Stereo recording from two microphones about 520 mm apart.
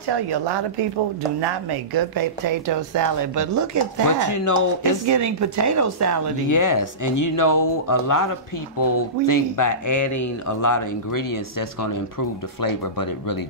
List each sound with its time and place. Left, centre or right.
0.1 s a woman's voice: right
4.2 s speech: left
5.0 s a woman's voice: right
6.5 s speech: left
12.6 s speech: left